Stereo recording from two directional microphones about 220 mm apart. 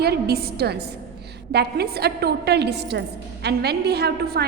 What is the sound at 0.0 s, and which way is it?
A woman's voice, 45° right (ahead or behind).